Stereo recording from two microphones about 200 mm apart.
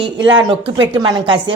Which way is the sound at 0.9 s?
20° right (ahead or behind).